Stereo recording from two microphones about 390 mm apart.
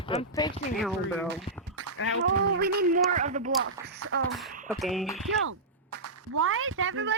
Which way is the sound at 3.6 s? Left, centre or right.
Right.